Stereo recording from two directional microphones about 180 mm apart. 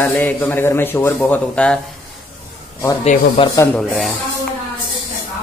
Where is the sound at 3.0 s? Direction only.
35° left (ahead or behind).